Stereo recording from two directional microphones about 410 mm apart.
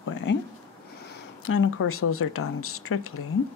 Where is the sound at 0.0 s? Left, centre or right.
Left.